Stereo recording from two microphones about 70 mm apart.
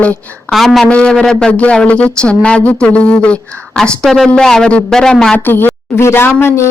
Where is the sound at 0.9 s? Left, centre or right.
Centre.